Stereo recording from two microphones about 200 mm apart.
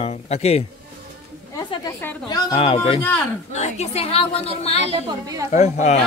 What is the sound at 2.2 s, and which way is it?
A woman's voice, 25° left (ahead or behind).